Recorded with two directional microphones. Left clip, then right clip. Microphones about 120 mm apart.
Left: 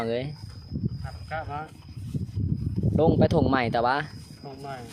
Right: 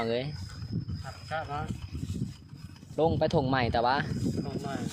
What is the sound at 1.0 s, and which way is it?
Speech, 15° right (ahead or behind).